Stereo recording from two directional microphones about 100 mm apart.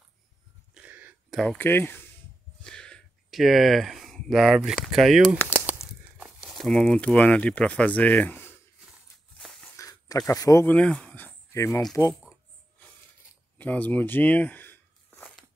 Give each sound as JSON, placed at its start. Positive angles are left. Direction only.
{"t": 0.7, "sound": "a sound", "side_deg": -15}
{"t": 1.3, "sound": "speech", "side_deg": 5}
{"t": 1.6, "sound": "speech", "side_deg": 20}
{"t": 2.6, "sound": "speech", "side_deg": 10}
{"t": 9.4, "sound": "biting", "side_deg": 5}
{"t": 9.8, "sound": "a sound", "side_deg": 35}
{"t": 10.6, "sound": "speech", "side_deg": 15}
{"t": 11.8, "sound": "speech", "side_deg": 5}
{"t": 13.6, "sound": "a sound", "side_deg": 15}